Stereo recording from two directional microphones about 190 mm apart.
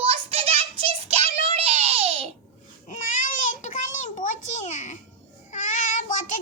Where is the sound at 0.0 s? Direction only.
30° right (ahead or behind).